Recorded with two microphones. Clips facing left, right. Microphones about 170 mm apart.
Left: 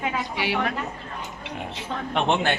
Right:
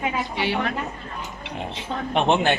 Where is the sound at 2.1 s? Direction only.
20° right (ahead or behind).